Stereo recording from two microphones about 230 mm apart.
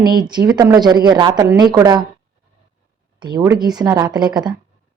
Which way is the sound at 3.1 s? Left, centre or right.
Centre.